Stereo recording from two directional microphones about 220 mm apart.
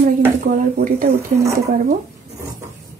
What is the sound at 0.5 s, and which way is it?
Speech, 40° right (ahead or behind).